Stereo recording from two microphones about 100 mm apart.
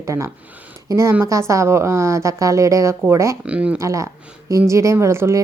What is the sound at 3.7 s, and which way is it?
A woman's voice, 30° right (ahead or behind).